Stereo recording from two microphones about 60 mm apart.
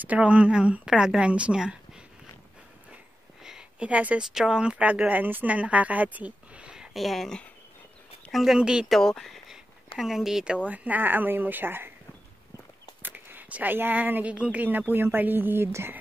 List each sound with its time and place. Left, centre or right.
0.0 s speech: right
3.4 s a sound: centre
3.9 s speech: right
4.2 s speech: centre
7.0 s speech: centre
8.5 s speech: centre
8.8 s speech: centre
9.5 s a sound: centre
10.7 s speech: right
13.0 s speech: right
14.3 s speech: centre
14.6 s speech: right